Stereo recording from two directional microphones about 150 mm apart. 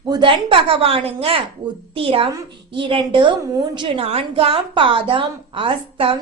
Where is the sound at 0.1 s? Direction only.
35° right (ahead or behind).